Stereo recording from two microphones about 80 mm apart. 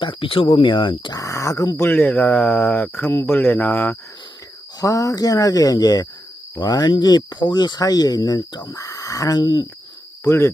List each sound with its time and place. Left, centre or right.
0.0 s speech: left
1.1 s speech: left
3.1 s speech: left
4.8 s speech: left
8.8 s speech: left
10.2 s cricket: left